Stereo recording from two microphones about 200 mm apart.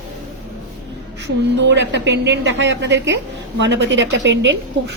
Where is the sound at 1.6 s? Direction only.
60° right (ahead or behind).